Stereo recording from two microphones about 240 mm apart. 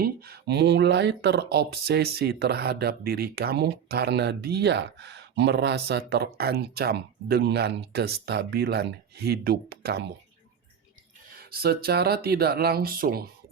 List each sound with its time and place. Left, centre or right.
0.0 s speech: right
11.3 s speech: right